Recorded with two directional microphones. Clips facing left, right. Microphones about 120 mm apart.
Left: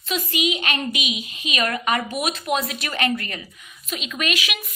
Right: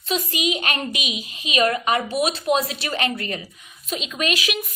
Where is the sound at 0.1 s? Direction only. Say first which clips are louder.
Even; 35° right (ahead or behind).